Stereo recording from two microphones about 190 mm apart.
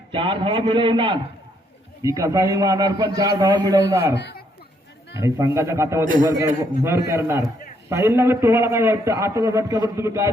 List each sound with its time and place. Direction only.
0.1 s a man's voice: 25° right (ahead or behind)
4.2 s speech: 60° left (ahead or behind)
5.2 s a man's voice: 15° right (ahead or behind)